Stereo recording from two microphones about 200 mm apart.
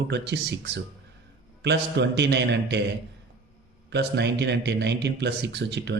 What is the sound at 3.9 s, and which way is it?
A man's voice, 60° right (ahead or behind).